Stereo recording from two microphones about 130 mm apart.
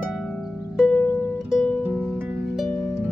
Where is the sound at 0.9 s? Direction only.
15° left (ahead or behind).